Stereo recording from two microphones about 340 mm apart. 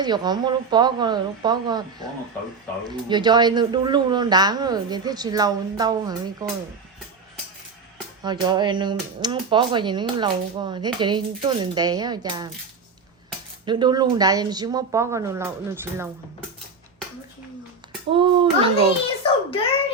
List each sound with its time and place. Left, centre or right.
0.0 s speech: centre
8.2 s speech: centre
13.7 s speech: centre
18.1 s speech: centre
19.2 s a sound: centre